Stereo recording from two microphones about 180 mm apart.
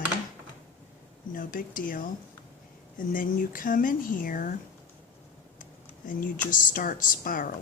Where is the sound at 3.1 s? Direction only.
50° left (ahead or behind).